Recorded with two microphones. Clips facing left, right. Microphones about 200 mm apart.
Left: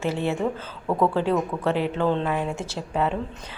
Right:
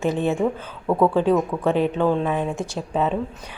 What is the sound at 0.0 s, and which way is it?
A woman's voice, 15° right (ahead or behind).